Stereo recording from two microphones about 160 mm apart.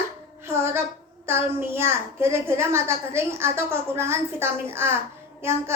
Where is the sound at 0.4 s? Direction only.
15° right (ahead or behind).